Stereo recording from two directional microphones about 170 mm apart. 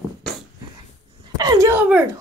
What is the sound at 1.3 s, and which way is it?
Speech, 20° right (ahead or behind).